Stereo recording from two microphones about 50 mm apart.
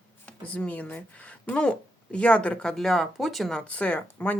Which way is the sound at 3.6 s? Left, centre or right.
Left.